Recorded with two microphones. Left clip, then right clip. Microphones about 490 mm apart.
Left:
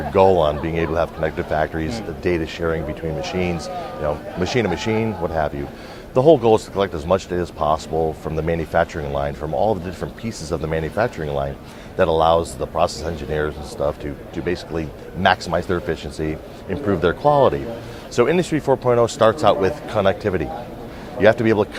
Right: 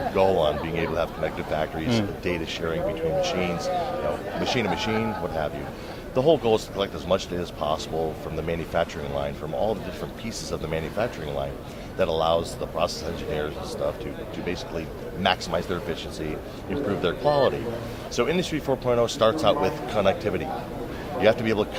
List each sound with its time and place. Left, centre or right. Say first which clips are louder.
0.1 s speech: left 7 dB; left